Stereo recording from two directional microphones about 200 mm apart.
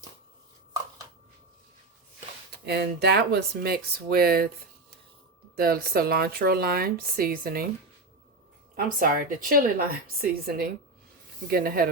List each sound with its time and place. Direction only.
2.6 s speech: 55° right (ahead or behind)
5.5 s speech: 45° right (ahead or behind)
8.7 s speech: 45° right (ahead or behind)